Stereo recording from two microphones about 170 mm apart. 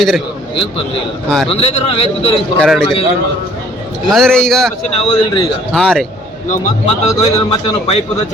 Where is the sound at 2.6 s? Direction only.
Centre (ahead or behind).